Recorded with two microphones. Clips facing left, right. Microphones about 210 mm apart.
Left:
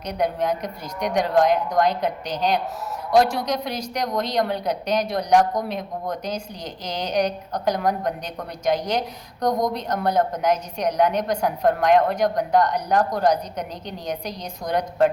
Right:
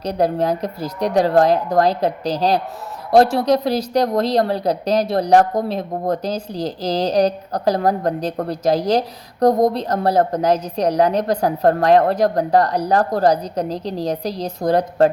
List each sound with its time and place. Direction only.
0.0 s speech: 30° right (ahead or behind)